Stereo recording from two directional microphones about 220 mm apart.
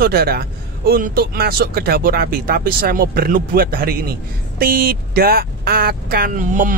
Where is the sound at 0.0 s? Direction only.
45° right (ahead or behind).